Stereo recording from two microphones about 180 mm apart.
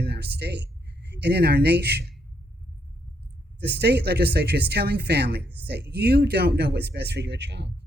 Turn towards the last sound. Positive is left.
turn(degrees=-70)  # may be behind; listen again after turning